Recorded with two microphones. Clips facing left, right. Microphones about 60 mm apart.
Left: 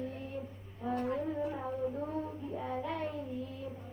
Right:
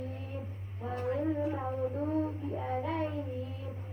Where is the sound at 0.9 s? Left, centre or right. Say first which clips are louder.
Right 1 dB; right.